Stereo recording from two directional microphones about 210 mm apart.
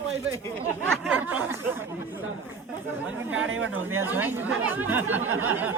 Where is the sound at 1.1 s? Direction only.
10° right (ahead or behind).